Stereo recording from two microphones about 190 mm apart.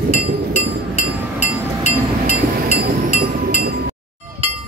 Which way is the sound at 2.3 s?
50° right (ahead or behind).